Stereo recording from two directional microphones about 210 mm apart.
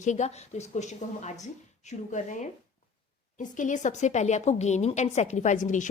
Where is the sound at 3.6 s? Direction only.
35° left (ahead or behind).